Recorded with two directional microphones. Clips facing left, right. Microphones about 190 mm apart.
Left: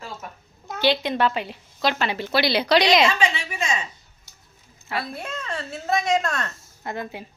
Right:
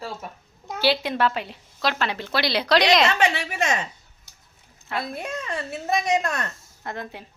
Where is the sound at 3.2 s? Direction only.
65° right (ahead or behind).